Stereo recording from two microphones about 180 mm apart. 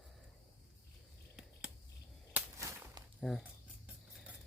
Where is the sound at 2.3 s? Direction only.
10° right (ahead or behind).